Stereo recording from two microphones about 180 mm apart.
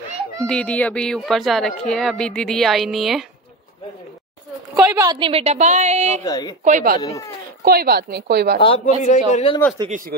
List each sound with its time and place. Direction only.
0.5 s a woman's voice: 5° left (ahead or behind)
4.9 s a woman's voice: 20° right (ahead or behind); by 6.2 s 40° right (ahead or behind)
6.2 s speech: 20° left (ahead or behind)
6.6 s speech: 45° right (ahead or behind)
7.0 s speech: 20° left (ahead or behind)
7.6 s speech: 60° right (ahead or behind)
8.5 s a man's voice: 35° left (ahead or behind)
9.8 s speech: 50° right (ahead or behind)